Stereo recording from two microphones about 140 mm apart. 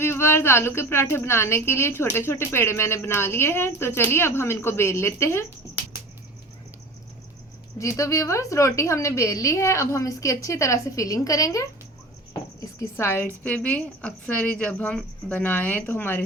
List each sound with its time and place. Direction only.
0.0 s a woman's voice: 20° left (ahead or behind)
7.8 s a woman's voice: 20° left (ahead or behind)